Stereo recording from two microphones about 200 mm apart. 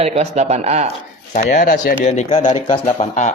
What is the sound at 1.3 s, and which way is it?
Speech, 40° left (ahead or behind).